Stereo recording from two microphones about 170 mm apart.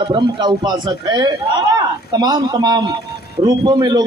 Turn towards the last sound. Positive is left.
turn(degrees=-25)  # may be behind; listen again after turning